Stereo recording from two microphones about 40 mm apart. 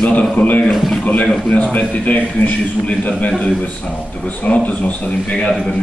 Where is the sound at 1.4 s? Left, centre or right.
Left.